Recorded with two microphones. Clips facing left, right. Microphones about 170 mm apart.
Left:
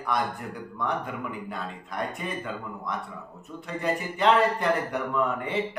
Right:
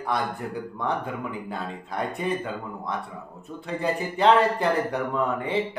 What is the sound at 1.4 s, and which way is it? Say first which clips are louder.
Speech: right 3 dB; 30° right (ahead or behind).